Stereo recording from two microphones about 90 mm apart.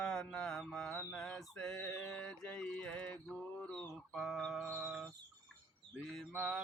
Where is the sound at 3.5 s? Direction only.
10° left (ahead or behind).